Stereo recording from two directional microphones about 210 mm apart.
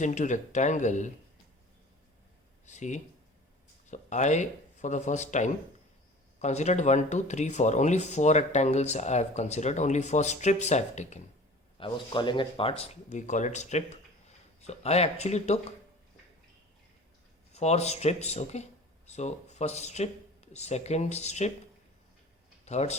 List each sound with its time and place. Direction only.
0.0 s speech: 35° left (ahead or behind)
2.6 s speech: 35° left (ahead or behind)
11.8 s speech: 20° left (ahead or behind)
17.5 s speech: 30° left (ahead or behind)
22.6 s speech: 30° left (ahead or behind)